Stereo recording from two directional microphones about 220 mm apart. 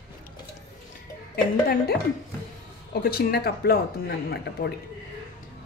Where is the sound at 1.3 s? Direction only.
45° left (ahead or behind).